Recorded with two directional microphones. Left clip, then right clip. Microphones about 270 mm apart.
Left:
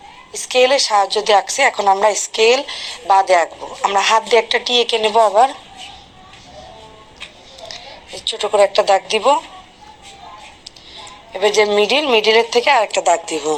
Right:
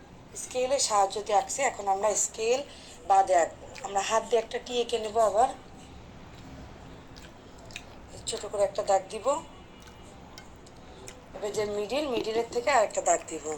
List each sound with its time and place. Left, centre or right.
0.5 s a woman's voice: left
7.7 s a woman's voice: left
11.3 s a woman's voice: left